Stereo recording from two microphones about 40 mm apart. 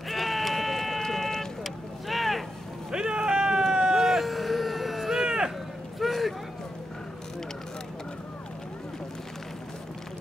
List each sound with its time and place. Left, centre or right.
0.1 s sheep: centre
1.6 s vehicle: centre
2.9 s run: centre
3.9 s a sound: centre